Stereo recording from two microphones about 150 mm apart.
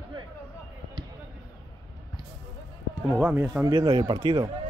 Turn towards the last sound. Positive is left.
turn(degrees=-35)  # may be behind; listen again after turning